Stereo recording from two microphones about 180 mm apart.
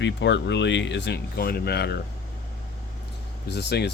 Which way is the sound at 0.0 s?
75° left (ahead or behind).